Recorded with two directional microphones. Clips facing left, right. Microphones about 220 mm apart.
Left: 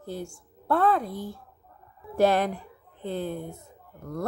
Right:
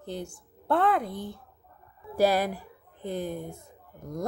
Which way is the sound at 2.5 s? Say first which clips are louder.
Left 1 dB; 10° right (ahead or behind).